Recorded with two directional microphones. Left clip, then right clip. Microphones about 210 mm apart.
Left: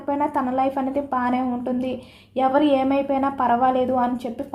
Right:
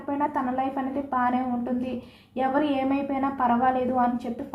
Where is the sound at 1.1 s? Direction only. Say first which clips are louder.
Even; 45° left (ahead or behind).